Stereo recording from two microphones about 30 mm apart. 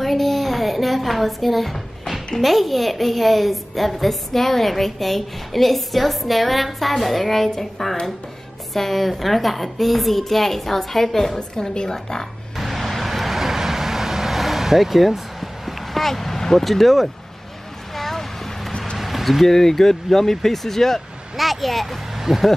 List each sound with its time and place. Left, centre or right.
0.0 s a sound: centre
2.4 s a child's voice: centre
11.3 s a woman's voice: left
12.5 s vehicle: centre
16.6 s a child's voice: centre
17.9 s a sound: centre
18.9 s a sound: centre
19.4 s speech: centre
21.4 s speech: centre